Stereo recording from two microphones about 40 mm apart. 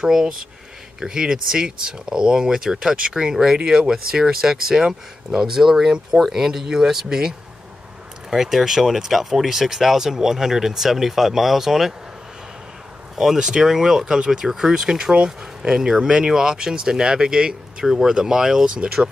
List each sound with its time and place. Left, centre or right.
0.0 s speech: centre
13.1 s speech: centre